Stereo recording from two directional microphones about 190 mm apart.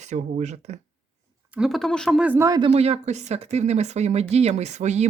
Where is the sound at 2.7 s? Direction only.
35° right (ahead or behind).